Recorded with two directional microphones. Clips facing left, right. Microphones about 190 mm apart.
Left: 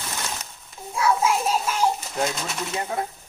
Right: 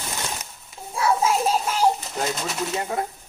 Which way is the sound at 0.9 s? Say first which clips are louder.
Even; 30° right (ahead or behind).